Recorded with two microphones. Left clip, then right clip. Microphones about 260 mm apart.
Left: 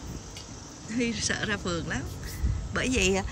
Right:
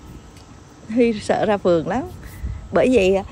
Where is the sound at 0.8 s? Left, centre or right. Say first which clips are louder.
Right 11 dB; centre.